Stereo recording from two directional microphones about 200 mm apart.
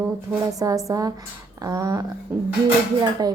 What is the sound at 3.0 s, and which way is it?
Speech, 20° right (ahead or behind).